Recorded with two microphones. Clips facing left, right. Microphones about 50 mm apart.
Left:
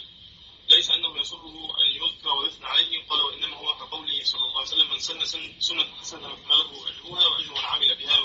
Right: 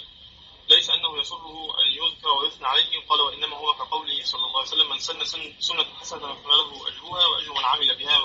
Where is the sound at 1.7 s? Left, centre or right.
Right.